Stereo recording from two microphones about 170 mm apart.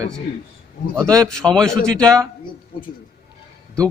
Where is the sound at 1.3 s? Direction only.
5° left (ahead or behind).